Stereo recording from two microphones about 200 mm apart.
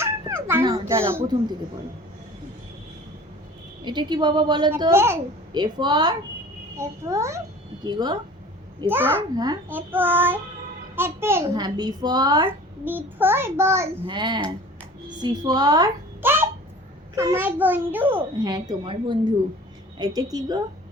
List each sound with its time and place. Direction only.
0.4 s a child's voice: 15° right (ahead or behind)
3.8 s a woman's voice: 20° right (ahead or behind)
8.8 s a child's voice: 10° right (ahead or behind)
12.5 s a child's voice: 10° right (ahead or behind)